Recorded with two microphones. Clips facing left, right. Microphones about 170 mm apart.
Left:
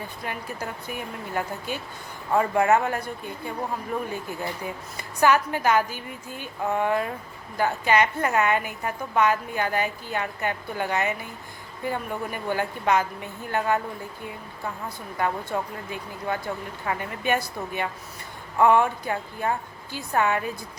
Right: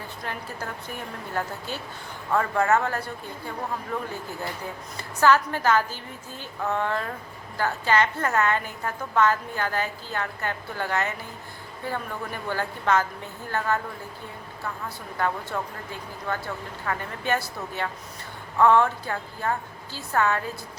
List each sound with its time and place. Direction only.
0.3 s a woman's voice: 10° left (ahead or behind)
15.5 s a woman's voice: 15° left (ahead or behind)